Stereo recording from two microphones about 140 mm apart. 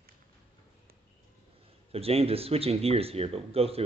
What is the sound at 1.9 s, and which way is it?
A man's voice, 45° right (ahead or behind).